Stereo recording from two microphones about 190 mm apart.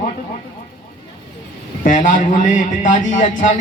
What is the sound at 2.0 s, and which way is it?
A man's voice, 45° left (ahead or behind).